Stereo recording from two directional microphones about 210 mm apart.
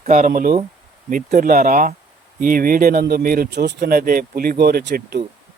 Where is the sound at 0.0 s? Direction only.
35° right (ahead or behind).